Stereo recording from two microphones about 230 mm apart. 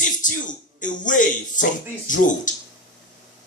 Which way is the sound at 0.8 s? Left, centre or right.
Left.